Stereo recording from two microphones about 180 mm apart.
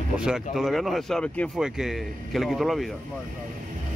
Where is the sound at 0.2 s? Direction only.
5° right (ahead or behind).